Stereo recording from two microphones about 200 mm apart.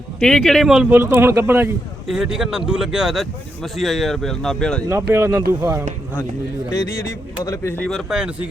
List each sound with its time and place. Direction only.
0.2 s speech: 5° left (ahead or behind); by 1.7 s 10° right (ahead or behind)
2.0 s speech: centre (ahead or behind)
5.1 s speech: 10° right (ahead or behind)
6.7 s speech: 15° left (ahead or behind); by 8.4 s 5° right (ahead or behind)